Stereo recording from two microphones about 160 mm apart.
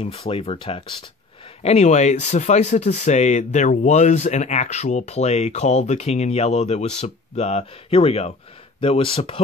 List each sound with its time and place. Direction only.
0.0 s speech: 35° left (ahead or behind)